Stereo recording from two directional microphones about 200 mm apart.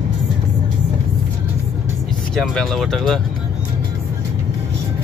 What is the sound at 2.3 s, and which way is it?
Speech, 5° left (ahead or behind).